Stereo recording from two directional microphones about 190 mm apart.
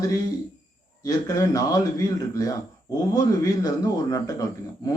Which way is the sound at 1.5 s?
20° left (ahead or behind).